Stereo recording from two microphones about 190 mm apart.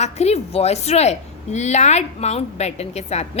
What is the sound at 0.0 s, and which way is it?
A woman's voice, 35° left (ahead or behind).